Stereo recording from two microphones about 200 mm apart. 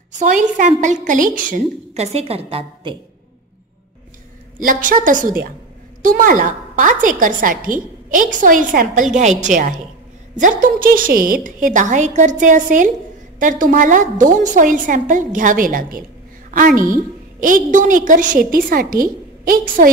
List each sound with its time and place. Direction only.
0.2 s a woman's voice: 40° right (ahead or behind)
2.1 s a woman's voice: 30° right (ahead or behind)
4.6 s a woman's voice: 40° right (ahead or behind)